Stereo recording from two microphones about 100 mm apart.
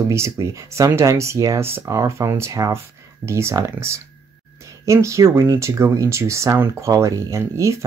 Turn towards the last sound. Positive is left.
turn(degrees=-30)  # may be behind; listen again after turning